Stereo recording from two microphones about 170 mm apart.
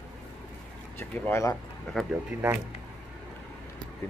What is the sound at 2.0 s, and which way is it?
Speech, 5° left (ahead or behind).